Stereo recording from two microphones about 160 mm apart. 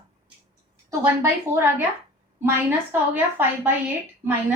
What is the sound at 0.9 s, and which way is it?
Speech, 15° right (ahead or behind).